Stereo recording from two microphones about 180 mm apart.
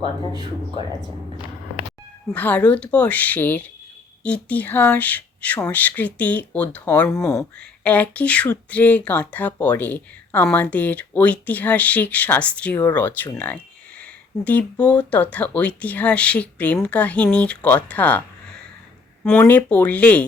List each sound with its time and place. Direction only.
0.0 s speech: 25° right (ahead or behind)
2.3 s speech: 10° left (ahead or behind)
19.2 s speech: 5° left (ahead or behind)